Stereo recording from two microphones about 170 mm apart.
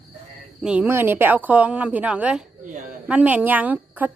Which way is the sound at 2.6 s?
50° right (ahead or behind).